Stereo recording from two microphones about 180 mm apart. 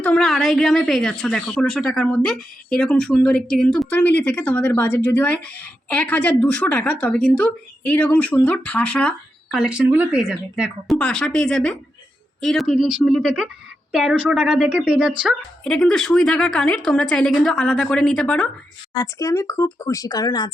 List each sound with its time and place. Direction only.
0.0 s speech: 5° left (ahead or behind)
18.9 s speech: 15° left (ahead or behind)